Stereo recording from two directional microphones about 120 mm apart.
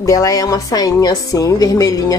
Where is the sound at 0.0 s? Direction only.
30° left (ahead or behind).